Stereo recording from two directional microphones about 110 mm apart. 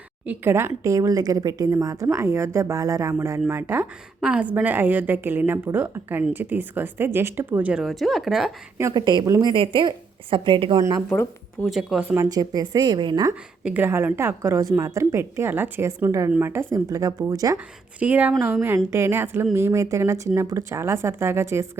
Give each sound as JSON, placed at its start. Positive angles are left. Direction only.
{"t": 0.3, "sound": "a woman's voice", "side_deg": -20}
{"t": 4.2, "sound": "a woman's voice", "side_deg": -10}
{"t": 7.7, "sound": "speech", "side_deg": 0}
{"t": 8.9, "sound": "a woman's voice", "side_deg": -40}
{"t": 11.1, "sound": "speech", "side_deg": 15}
{"t": 11.6, "sound": "speech", "side_deg": 0}
{"t": 12.1, "sound": "a woman's voice", "side_deg": -30}
{"t": 13.7, "sound": "a woman's voice", "side_deg": -20}
{"t": 18.0, "sound": "a woman's voice", "side_deg": -10}